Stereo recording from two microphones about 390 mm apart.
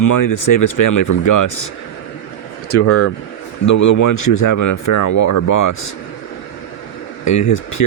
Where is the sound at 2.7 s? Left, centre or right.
Left.